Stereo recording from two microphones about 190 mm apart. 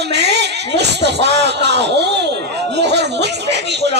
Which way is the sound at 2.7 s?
65° right (ahead or behind).